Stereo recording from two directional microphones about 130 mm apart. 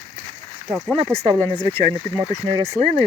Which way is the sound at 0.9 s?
45° right (ahead or behind).